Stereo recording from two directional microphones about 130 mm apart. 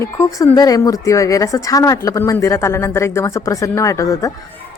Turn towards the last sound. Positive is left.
turn(degrees=25)  # may be behind; listen again after turning